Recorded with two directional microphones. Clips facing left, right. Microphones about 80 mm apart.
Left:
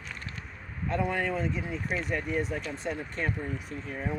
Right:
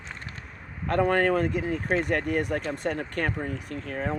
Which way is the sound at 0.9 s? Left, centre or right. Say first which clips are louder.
Right 7 dB; right.